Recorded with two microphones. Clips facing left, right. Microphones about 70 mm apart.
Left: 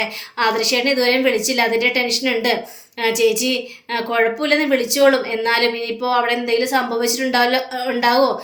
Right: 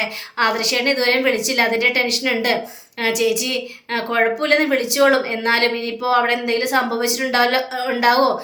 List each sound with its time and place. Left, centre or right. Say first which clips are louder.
0.3 s a woman's voice: left 1 dB; right